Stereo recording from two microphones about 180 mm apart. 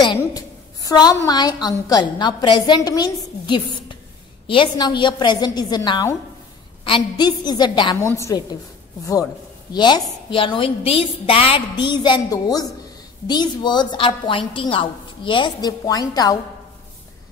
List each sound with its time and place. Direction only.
0.0 s a woman's voice: 25° left (ahead or behind)